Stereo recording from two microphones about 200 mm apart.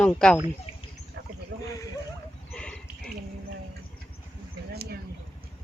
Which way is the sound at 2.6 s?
5° left (ahead or behind).